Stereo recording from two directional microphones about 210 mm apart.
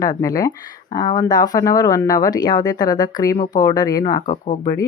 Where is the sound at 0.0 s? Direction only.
15° left (ahead or behind).